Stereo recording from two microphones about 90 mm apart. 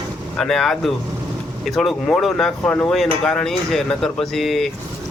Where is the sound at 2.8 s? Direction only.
5° left (ahead or behind).